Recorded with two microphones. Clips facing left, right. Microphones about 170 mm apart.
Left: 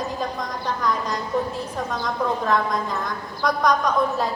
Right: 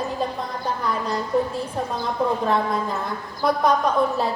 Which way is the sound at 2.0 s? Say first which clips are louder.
Right 2 dB; 30° right (ahead or behind).